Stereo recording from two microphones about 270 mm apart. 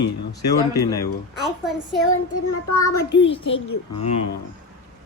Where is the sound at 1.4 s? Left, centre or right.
Centre.